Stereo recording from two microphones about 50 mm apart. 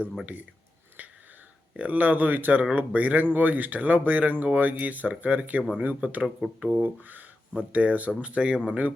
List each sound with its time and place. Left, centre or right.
1.0 s wheeze: right
1.7 s speech: right
6.6 s speech: right
6.8 s speech: right